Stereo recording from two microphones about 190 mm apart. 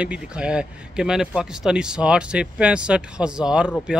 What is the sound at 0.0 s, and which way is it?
Speech, 5° right (ahead or behind).